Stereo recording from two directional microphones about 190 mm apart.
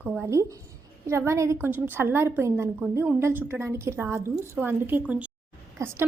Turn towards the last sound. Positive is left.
turn(degrees=-15)  # may be behind; listen again after turning